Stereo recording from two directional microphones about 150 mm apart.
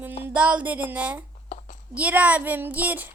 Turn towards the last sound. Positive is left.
turn(degrees=-10)  # may be behind; listen again after turning